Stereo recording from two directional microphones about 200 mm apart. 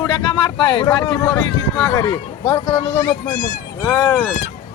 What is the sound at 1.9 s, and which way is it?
A man's voice, 20° left (ahead or behind).